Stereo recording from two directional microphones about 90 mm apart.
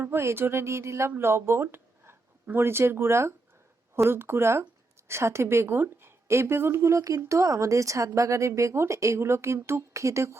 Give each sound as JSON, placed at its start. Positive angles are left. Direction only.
{"t": 0.0, "sound": "a woman's voice", "side_deg": -30}